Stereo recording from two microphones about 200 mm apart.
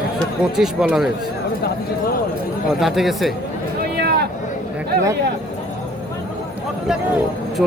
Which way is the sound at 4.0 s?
55° right (ahead or behind).